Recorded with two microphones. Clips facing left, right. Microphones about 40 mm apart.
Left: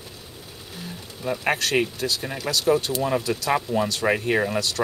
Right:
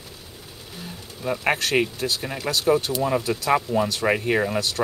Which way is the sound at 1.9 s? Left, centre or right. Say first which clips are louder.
Even; right.